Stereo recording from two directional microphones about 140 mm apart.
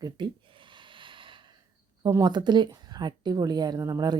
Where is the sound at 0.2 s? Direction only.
30° right (ahead or behind).